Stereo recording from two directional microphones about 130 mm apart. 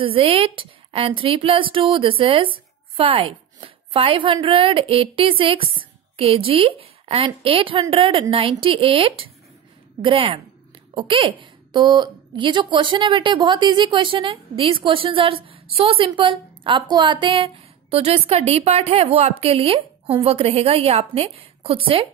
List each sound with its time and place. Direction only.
0.0 s a woman's voice: 45° right (ahead or behind)